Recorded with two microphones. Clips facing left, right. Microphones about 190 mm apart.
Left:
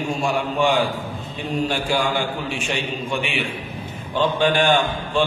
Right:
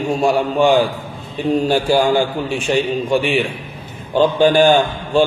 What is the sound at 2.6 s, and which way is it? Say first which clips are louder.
A man's voice: right 9 dB; 35° right (ahead or behind).